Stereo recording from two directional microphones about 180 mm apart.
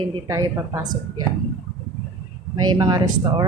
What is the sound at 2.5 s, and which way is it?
Speech, 20° right (ahead or behind).